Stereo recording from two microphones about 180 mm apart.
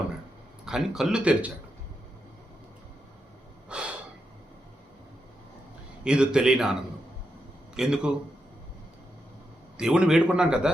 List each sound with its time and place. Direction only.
0.6 s a man's voice: 5° right (ahead or behind)
3.7 s snort: 5° right (ahead or behind)
6.1 s a man's voice: 5° right (ahead or behind)
7.8 s a man's voice: 5° right (ahead or behind)
9.7 s a man's voice: 5° right (ahead or behind)